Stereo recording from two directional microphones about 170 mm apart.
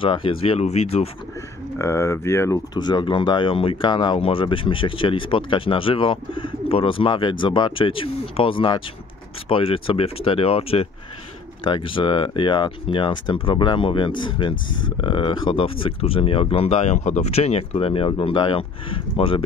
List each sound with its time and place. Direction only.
0.0 s speech: 30° left (ahead or behind)
1.8 s speech: 15° left (ahead or behind); by 19.4 s 30° left (ahead or behind)